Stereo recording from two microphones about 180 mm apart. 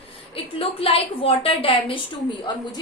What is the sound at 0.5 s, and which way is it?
A woman's voice, 30° left (ahead or behind).